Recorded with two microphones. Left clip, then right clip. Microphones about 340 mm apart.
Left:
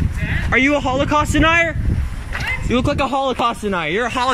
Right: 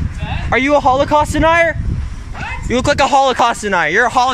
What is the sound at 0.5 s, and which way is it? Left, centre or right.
Speech, centre.